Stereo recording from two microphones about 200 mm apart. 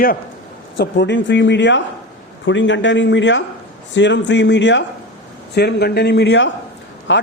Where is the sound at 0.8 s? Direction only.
60° left (ahead or behind).